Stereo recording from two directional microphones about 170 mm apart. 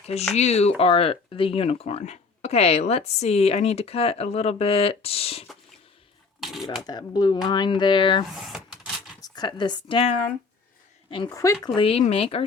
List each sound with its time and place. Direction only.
0.3 s speech: 40° left (ahead or behind)
6.4 s speech: centre (ahead or behind)
6.8 s speech: 25° left (ahead or behind)
8.3 s vehicle: centre (ahead or behind)
9.2 s speech: 25° left (ahead or behind)